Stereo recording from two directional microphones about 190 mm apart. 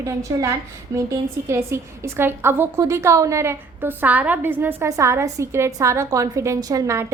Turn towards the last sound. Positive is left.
turn(degrees=-15)  # may be behind; listen again after turning